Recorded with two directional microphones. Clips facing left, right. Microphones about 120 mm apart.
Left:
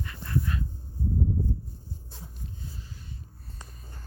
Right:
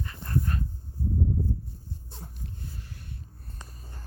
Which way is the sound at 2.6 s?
60° right (ahead or behind).